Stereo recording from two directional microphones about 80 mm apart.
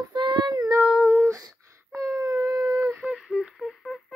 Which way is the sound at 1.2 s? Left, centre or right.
Right.